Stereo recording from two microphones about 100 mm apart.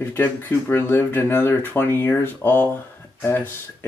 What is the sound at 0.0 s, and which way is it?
Speech, 20° left (ahead or behind).